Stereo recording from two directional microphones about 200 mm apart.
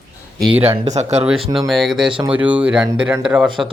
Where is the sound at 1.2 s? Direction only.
Centre (ahead or behind).